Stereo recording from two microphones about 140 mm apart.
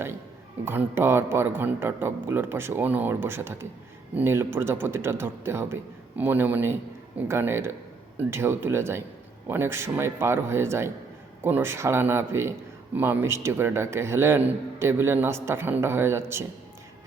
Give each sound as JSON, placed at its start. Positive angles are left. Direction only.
{"t": 0.6, "sound": "speech", "side_deg": -15}